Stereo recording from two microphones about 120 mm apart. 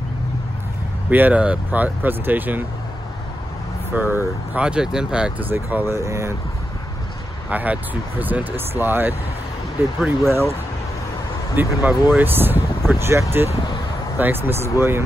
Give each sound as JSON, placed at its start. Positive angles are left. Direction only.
{"t": 1.1, "sound": "speech", "side_deg": -15}
{"t": 3.9, "sound": "speech", "side_deg": -15}
{"t": 7.4, "sound": "speech", "side_deg": -10}
{"t": 9.9, "sound": "speech", "side_deg": -5}
{"t": 11.5, "sound": "speech", "side_deg": -15}